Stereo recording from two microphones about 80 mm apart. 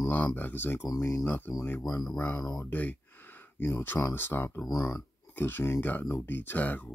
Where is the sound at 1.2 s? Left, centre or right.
Left.